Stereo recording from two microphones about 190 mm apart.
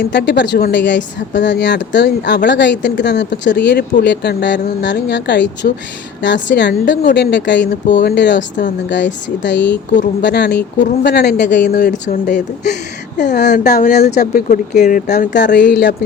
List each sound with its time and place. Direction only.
0.0 s a woman's voice: 60° left (ahead or behind)
8.4 s speech: 40° left (ahead or behind)
9.4 s a woman's voice: 70° left (ahead or behind)
9.9 s speech: 40° left (ahead or behind)
10.2 s speech: 65° left (ahead or behind); by 15.8 s 45° left (ahead or behind)